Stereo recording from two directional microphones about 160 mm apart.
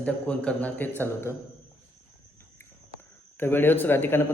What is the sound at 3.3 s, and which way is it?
Speech, 10° left (ahead or behind).